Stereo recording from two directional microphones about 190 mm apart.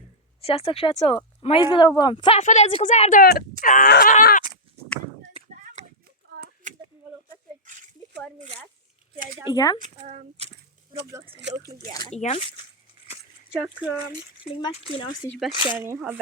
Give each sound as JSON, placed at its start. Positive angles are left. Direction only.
{"t": 0.4, "sound": "speech", "side_deg": 30}
{"t": 2.4, "sound": "speech", "side_deg": 35}
{"t": 7.6, "sound": "a sound", "side_deg": -40}
{"t": 9.1, "sound": "speech", "side_deg": -45}
{"t": 9.5, "sound": "speech", "side_deg": 20}
{"t": 10.1, "sound": "a child's voice", "side_deg": -35}
{"t": 12.1, "sound": "speech", "side_deg": 35}
{"t": 13.6, "sound": "speech", "side_deg": -5}
{"t": 14.5, "sound": "speech", "side_deg": 30}
{"t": 15.3, "sound": "speech", "side_deg": 0}
{"t": 15.6, "sound": "speech", "side_deg": -10}